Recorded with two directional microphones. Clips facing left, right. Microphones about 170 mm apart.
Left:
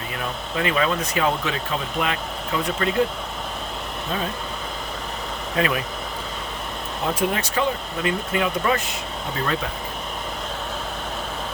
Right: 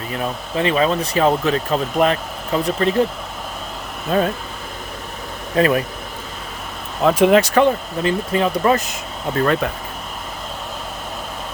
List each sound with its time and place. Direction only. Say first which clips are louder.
0.1 s speech: right 6 dB; 30° right (ahead or behind)
4.1 s speech: right 10 dB; 55° right (ahead or behind)
5.5 s speech: right 7 dB; 40° right (ahead or behind)
7.0 s speech: right 11 dB; 85° right
8.0 s speech: right 5 dB; 35° right (ahead or behind)